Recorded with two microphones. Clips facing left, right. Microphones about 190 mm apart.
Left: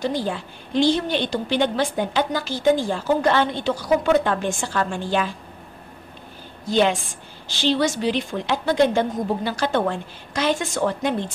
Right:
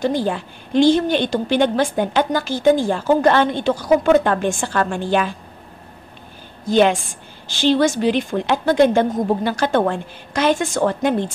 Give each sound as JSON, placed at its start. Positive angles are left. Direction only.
{"t": 0.0, "sound": "a woman's voice", "side_deg": -50}
{"t": 6.7, "sound": "a woman's voice", "side_deg": -50}